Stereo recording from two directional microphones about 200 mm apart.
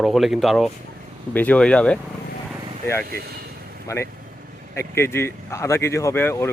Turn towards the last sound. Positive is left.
turn(degrees=10)  # may be behind; listen again after turning